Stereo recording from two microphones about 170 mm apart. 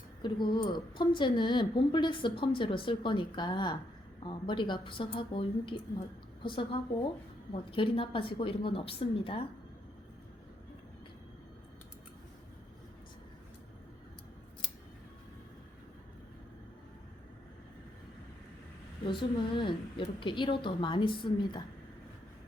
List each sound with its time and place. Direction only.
0.2 s a woman's voice: 25° left (ahead or behind)
19.0 s a woman's voice: 30° left (ahead or behind)